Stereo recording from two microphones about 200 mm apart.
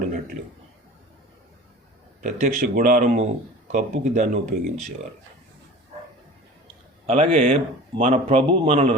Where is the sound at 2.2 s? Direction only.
40° right (ahead or behind).